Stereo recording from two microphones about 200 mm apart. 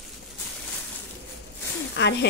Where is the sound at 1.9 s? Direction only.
60° left (ahead or behind).